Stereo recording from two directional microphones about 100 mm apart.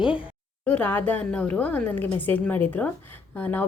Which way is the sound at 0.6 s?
15° left (ahead or behind).